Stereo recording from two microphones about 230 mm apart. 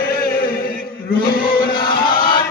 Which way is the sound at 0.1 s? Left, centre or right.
Left.